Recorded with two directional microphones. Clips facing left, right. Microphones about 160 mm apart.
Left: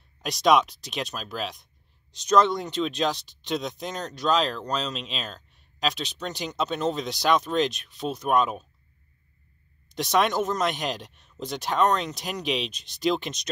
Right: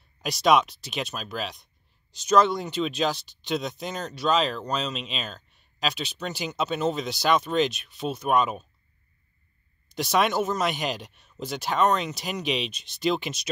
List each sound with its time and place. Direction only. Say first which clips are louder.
0.2 s speech: even; centre (ahead or behind)
9.8 s speech: even; centre (ahead or behind)